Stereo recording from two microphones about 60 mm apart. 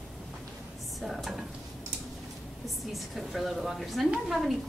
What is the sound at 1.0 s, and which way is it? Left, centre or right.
Stir, centre.